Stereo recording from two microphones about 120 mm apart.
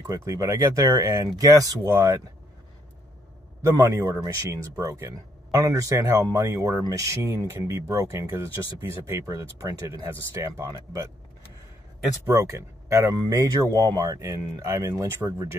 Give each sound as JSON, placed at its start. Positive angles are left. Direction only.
{"t": 0.0, "sound": "speech", "side_deg": -25}
{"t": 3.7, "sound": "speech", "side_deg": -25}
{"t": 12.3, "sound": "speech", "side_deg": -25}